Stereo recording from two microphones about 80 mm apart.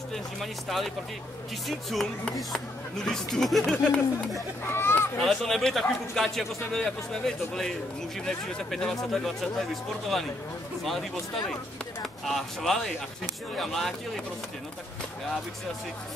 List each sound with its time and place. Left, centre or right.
0.1 s a man's voice: centre
3.7 s speech: centre
4.6 s speech: left
5.2 s a man's voice: centre